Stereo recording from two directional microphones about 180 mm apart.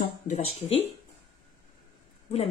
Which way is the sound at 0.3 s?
35° left (ahead or behind).